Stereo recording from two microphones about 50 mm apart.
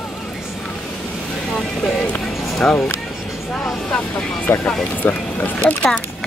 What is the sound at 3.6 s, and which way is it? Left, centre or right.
Speech, centre.